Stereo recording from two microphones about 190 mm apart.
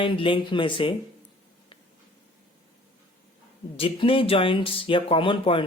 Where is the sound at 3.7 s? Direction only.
30° left (ahead or behind).